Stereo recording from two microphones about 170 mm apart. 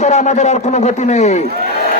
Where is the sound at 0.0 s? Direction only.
40° left (ahead or behind).